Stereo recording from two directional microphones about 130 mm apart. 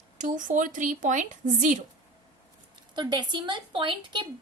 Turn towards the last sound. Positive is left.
turn(degrees=-40)  # may be behind; listen again after turning